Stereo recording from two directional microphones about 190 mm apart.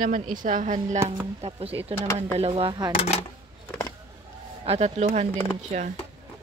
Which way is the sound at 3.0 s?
35° left (ahead or behind).